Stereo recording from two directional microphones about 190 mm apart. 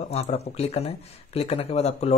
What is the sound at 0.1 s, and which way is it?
Speech, 35° left (ahead or behind).